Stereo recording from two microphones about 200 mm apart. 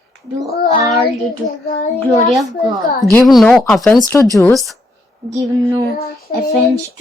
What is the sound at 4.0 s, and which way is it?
Speech, 15° left (ahead or behind).